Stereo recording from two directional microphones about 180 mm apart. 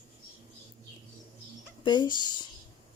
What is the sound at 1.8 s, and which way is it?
Speech, 25° left (ahead or behind).